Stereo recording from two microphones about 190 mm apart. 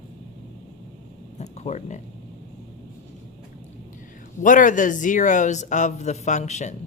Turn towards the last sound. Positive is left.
turn(degrees=40)  # may be behind; listen again after turning